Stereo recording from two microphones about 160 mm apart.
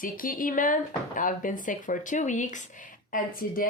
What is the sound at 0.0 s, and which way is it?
Speech, 60° left (ahead or behind).